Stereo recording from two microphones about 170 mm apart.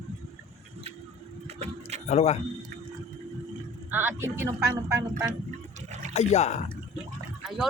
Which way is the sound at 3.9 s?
15° right (ahead or behind).